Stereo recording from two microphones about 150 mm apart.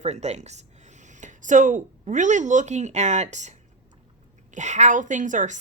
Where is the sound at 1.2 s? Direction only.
55° right (ahead or behind).